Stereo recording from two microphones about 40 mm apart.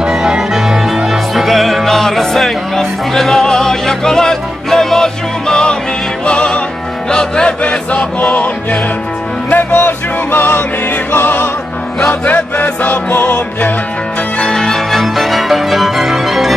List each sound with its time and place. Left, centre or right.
0.0 s music: centre; by 7.7 s left
9.5 s music: left
12.6 s music: left
14.4 s music: centre